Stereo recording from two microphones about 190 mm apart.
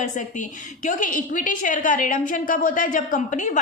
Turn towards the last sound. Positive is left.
turn(degrees=40)  # may be behind; listen again after turning